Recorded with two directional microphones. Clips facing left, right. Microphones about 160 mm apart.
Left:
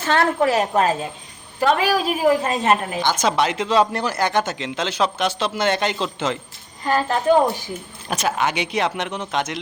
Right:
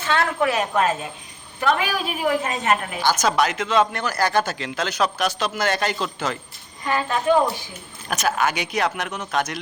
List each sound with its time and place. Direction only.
0.0 s a woman's voice: 35° left (ahead or behind)
6.8 s a woman's voice: 35° left (ahead or behind)
8.1 s speech: 25° left (ahead or behind)